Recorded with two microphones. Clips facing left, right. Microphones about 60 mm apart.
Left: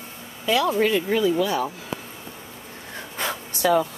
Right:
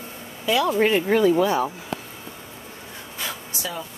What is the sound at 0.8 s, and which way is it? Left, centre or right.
Speech, right.